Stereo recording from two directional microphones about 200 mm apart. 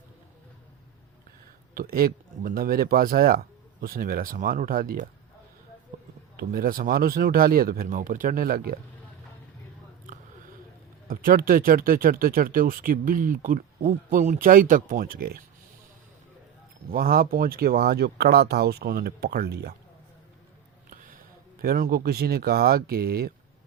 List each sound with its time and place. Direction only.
1.7 s speech: 45° right (ahead or behind)
6.3 s speech: 45° right (ahead or behind)
11.1 s speech: 45° right (ahead or behind)
16.9 s speech: 45° right (ahead or behind)
20.9 s a sound: 45° right (ahead or behind)
21.6 s speech: 50° right (ahead or behind)